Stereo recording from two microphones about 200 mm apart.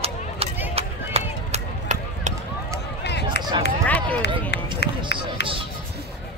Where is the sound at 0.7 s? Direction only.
30° right (ahead or behind).